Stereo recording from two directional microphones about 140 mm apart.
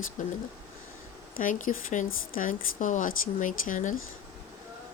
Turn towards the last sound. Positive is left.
turn(degrees=65)  # may be behind; listen again after turning